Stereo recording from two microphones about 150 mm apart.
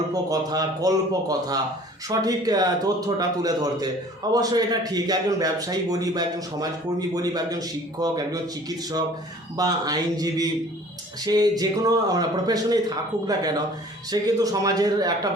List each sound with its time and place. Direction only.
0.1 s a man's voice: 25° right (ahead or behind)
9.6 s a man's voice: 25° right (ahead or behind)